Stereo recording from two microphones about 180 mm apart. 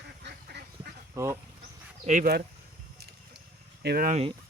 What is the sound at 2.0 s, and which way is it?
Speech, 50° right (ahead or behind).